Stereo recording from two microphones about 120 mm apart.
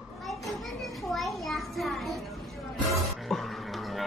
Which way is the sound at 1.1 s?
Centre (ahead or behind).